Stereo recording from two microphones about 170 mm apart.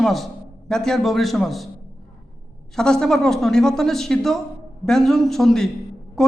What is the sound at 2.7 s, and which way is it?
Speech, 5° left (ahead or behind).